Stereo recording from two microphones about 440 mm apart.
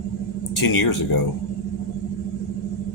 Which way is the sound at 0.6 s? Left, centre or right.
Left.